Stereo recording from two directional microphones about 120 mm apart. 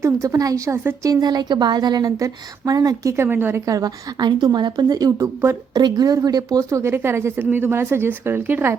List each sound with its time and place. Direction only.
0.0 s speech: 25° right (ahead or behind)